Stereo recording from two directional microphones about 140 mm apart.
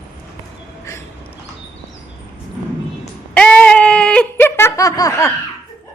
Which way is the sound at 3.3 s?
10° left (ahead or behind).